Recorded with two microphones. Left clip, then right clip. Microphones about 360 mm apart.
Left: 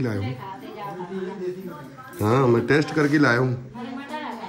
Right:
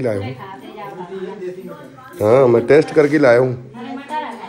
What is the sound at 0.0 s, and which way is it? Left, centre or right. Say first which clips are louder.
Speech: right 8 dB; centre.